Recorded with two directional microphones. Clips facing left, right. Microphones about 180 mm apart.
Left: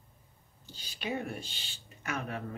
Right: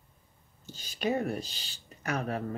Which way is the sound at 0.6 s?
45° right (ahead or behind).